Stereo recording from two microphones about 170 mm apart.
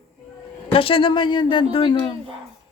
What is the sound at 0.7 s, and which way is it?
Speech, 30° left (ahead or behind).